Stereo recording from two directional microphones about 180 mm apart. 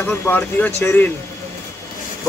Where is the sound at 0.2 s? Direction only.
10° left (ahead or behind).